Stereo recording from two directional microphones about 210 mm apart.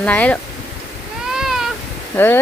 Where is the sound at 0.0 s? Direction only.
5° left (ahead or behind).